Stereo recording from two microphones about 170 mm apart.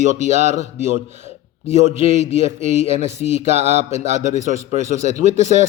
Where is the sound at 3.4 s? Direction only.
40° right (ahead or behind).